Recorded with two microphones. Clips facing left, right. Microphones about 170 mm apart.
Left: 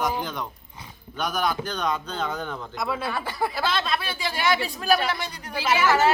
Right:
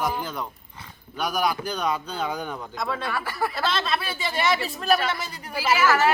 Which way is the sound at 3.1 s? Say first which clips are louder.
Even; 20° left (ahead or behind).